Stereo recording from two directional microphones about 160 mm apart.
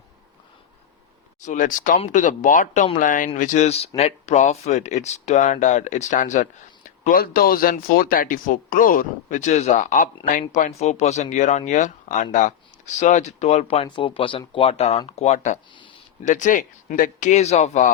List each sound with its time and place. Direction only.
1.4 s speech: 50° left (ahead or behind)
15.7 s speech: 30° left (ahead or behind)
16.2 s speech: 50° left (ahead or behind)